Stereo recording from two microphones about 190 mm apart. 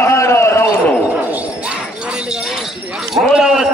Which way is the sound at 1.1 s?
5° right (ahead or behind).